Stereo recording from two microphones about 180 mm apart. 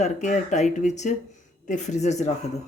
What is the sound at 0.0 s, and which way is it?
Speech, 40° left (ahead or behind).